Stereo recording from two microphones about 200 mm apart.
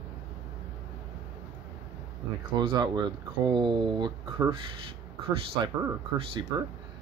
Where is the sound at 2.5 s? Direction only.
25° right (ahead or behind).